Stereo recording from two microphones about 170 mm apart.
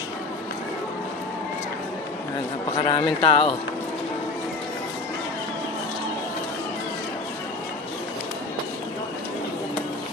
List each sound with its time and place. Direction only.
2.8 s speech: 30° left (ahead or behind)